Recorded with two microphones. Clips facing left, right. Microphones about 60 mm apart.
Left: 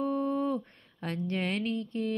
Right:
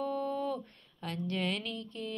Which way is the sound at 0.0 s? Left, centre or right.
Left.